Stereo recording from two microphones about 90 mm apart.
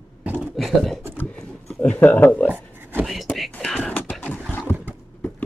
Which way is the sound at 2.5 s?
20° right (ahead or behind).